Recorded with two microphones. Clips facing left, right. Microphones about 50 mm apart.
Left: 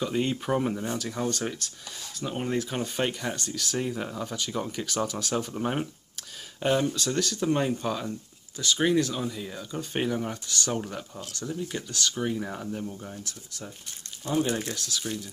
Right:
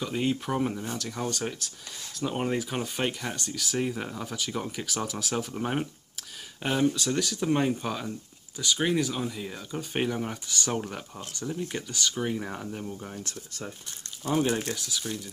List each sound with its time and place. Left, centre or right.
0.0 s speech: centre
13.2 s speech: right
14.2 s speech: centre